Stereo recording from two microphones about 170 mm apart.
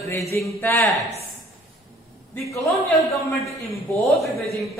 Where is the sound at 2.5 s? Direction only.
20° left (ahead or behind).